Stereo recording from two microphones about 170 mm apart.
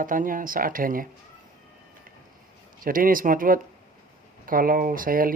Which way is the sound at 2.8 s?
55° right (ahead or behind).